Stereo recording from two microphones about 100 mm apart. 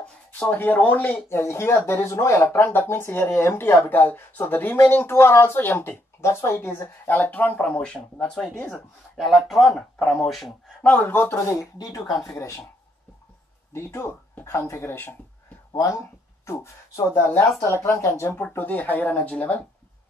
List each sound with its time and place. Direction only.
0.0 s speech: 15° left (ahead or behind)
10.8 s speech: 15° left (ahead or behind)
13.7 s speech: 25° left (ahead or behind)
15.7 s speech: 30° left (ahead or behind); by 19.6 s 15° left (ahead or behind)